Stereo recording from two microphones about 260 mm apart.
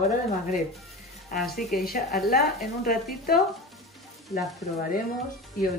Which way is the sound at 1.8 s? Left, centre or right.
Left.